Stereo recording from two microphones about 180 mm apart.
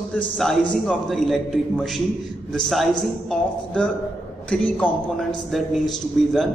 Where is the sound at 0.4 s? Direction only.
Centre (ahead or behind).